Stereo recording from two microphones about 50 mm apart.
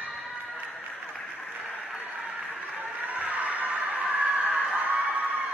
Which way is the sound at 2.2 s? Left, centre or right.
Right.